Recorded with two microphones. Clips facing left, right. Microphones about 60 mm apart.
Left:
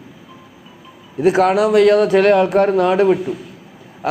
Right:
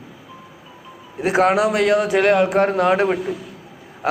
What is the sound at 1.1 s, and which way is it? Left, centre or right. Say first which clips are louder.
A man's voice: left 3 dB; right.